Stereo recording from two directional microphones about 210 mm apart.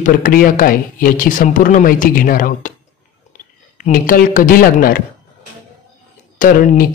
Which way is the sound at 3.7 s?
40° left (ahead or behind).